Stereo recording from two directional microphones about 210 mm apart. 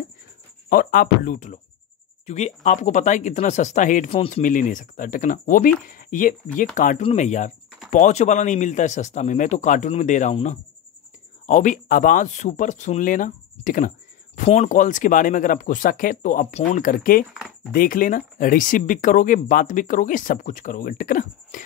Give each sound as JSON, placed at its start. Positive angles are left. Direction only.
{"t": 0.7, "sound": "speech", "side_deg": 40}
{"t": 17.3, "sound": "a sound", "side_deg": -5}
{"t": 17.7, "sound": "speech", "side_deg": 40}